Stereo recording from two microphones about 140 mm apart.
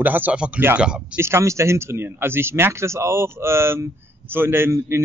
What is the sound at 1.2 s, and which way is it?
Speech, 20° right (ahead or behind).